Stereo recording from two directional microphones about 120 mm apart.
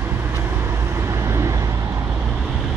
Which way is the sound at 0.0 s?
20° right (ahead or behind).